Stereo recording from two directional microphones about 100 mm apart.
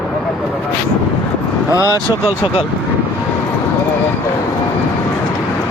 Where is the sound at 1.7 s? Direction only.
30° left (ahead or behind).